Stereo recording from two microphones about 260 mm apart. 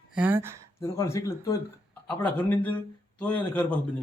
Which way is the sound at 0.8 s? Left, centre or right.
Centre.